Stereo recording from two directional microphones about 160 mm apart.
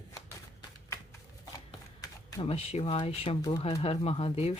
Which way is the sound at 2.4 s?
40° left (ahead or behind).